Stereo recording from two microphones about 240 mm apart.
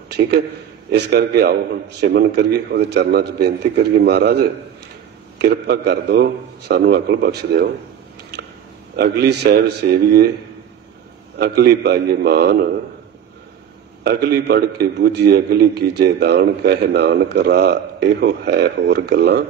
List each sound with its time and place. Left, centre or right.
0.9 s a man's voice: right
8.9 s a man's voice: right
11.3 s a man's voice: right
14.0 s a man's voice: right